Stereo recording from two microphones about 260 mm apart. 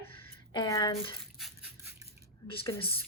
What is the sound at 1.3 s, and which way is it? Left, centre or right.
Crushing, centre.